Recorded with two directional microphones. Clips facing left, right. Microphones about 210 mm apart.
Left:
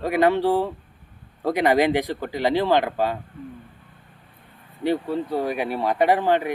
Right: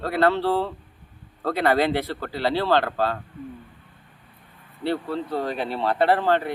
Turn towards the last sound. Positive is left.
turn(degrees=15)  # may be behind; listen again after turning